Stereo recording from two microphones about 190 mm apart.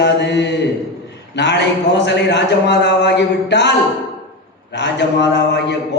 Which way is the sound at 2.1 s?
65° left (ahead or behind).